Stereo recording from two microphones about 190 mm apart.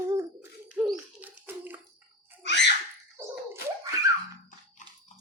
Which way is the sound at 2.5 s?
65° left (ahead or behind).